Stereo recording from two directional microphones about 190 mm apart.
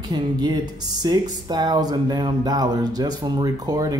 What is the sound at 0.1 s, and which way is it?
Speech, 20° right (ahead or behind).